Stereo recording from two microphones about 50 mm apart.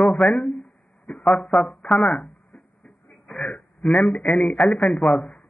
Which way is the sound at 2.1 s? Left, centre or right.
Left.